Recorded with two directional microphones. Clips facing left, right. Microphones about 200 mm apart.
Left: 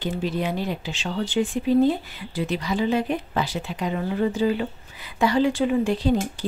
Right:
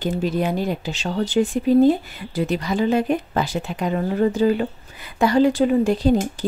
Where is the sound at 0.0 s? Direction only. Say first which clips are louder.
Right 4 dB; 45° right (ahead or behind).